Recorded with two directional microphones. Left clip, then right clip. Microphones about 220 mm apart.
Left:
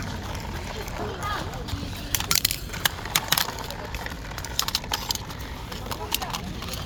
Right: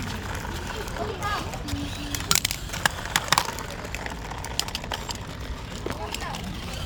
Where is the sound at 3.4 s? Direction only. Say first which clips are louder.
Even; 50° right (ahead or behind).